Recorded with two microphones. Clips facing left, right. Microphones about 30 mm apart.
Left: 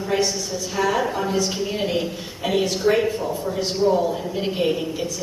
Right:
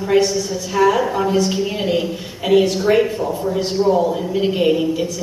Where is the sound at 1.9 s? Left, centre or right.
Right.